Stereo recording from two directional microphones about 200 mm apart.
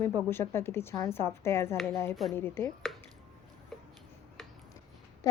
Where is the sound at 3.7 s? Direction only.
Centre (ahead or behind).